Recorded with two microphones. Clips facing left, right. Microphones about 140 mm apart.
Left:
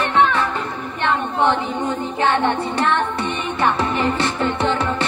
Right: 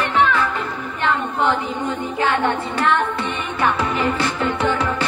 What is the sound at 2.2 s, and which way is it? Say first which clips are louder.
Music: left 1 dB; 25° left (ahead or behind).